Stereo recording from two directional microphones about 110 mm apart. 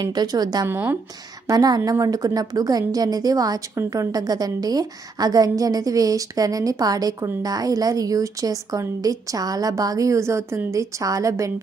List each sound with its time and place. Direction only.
0.0 s a woman's voice: 40° right (ahead or behind)
0.7 s speech: 20° right (ahead or behind)
1.5 s a woman's voice: 35° right (ahead or behind)